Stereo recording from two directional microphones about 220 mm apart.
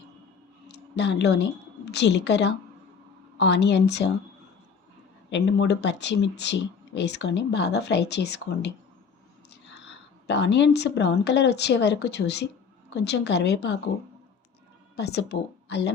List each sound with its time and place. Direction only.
0.7 s a woman's voice: 50° left (ahead or behind)
5.3 s speech: 55° left (ahead or behind)
10.2 s speech: 50° left (ahead or behind)
14.9 s speech: 50° left (ahead or behind)